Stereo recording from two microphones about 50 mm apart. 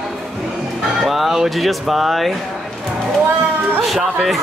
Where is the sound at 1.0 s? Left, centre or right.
Centre.